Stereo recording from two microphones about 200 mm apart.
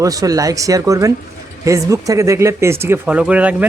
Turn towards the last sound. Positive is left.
turn(degrees=-5)  # may be behind; listen again after turning